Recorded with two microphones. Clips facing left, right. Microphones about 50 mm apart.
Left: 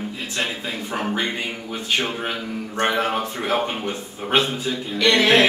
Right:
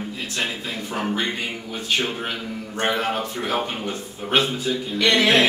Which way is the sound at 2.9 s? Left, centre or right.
Centre.